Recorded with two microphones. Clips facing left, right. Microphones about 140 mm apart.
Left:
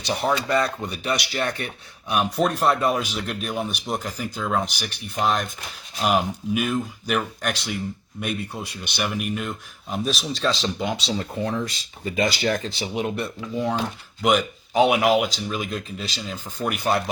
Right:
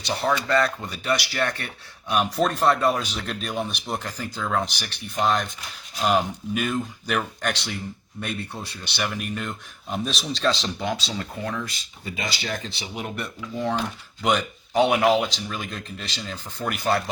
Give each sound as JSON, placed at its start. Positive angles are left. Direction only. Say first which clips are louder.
{"t": 0.1, "sound": "speech", "louder": "even", "side_deg": 15}
{"t": 11.4, "sound": "speech", "louder": "left 4 dB", "side_deg": 30}
{"t": 12.1, "sound": "speech", "louder": "left 8 dB", "side_deg": 50}
{"t": 13.0, "sound": "speech", "louder": "left 5 dB", "side_deg": 25}
{"t": 13.6, "sound": "speech", "louder": "left 1 dB", "side_deg": 5}